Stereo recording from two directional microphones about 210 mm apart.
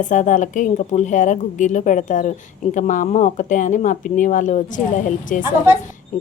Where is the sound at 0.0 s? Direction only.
35° left (ahead or behind).